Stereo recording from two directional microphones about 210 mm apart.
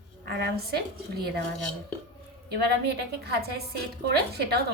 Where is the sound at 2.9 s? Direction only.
50° right (ahead or behind).